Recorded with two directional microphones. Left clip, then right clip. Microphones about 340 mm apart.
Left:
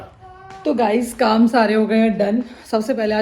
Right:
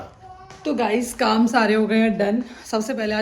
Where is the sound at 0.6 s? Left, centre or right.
Centre.